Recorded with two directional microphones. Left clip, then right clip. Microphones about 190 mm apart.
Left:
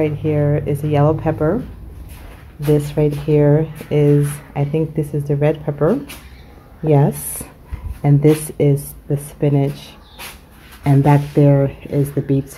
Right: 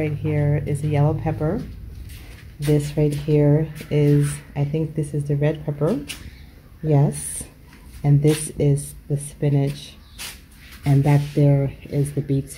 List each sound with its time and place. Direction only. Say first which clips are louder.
0.0 s speech: left 7 dB; centre (ahead or behind)
2.6 s speech: left 5 dB; 10° right (ahead or behind)
6.9 s speech: left 6 dB; 5° left (ahead or behind)